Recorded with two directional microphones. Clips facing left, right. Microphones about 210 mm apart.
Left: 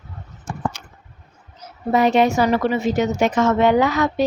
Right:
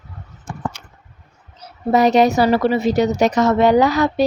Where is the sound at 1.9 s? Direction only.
40° right (ahead or behind).